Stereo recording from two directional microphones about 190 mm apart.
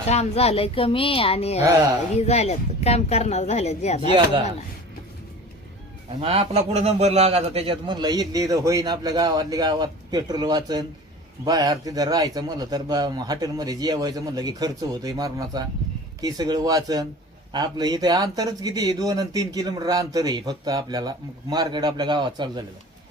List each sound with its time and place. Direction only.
0.1 s a woman's voice: 35° left (ahead or behind)
1.6 s speech: 15° right (ahead or behind)
2.1 s a woman's voice: 35° left (ahead or behind)
6.1 s speech: 30° right (ahead or behind)